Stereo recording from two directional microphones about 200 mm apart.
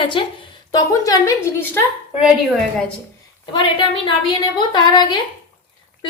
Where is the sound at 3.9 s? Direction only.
25° left (ahead or behind).